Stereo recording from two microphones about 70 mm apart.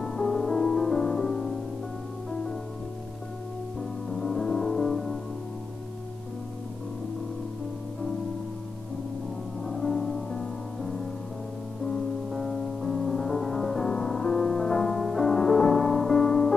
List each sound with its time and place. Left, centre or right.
0.0 s music: centre
4.1 s music: centre
9.6 s music: centre